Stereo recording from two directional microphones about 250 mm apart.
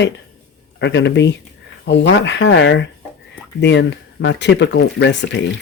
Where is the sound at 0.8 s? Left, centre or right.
Left.